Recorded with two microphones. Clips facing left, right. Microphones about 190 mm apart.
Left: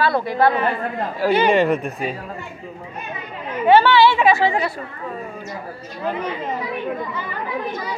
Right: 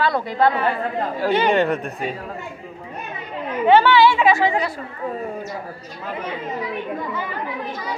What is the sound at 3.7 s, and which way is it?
Speech, 15° right (ahead or behind).